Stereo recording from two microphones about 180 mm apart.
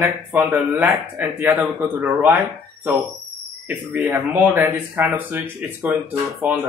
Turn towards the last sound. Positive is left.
turn(degrees=-10)  # may be behind; listen again after turning